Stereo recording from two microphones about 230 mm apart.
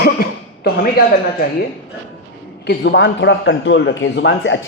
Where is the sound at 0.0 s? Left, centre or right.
Left.